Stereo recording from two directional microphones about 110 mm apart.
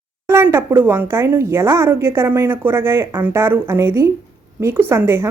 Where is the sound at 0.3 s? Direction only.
20° right (ahead or behind).